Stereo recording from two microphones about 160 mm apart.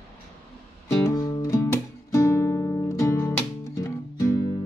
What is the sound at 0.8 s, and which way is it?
Music, 20° left (ahead or behind).